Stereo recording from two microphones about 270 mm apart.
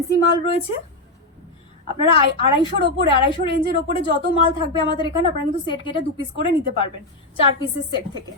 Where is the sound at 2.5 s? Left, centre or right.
Centre.